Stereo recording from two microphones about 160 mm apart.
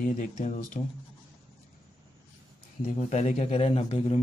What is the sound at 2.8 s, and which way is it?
Speech, 45° left (ahead or behind).